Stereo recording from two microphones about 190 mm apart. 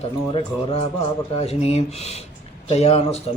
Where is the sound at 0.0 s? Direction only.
30° left (ahead or behind).